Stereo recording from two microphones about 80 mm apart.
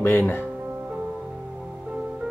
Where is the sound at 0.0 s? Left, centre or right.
Left.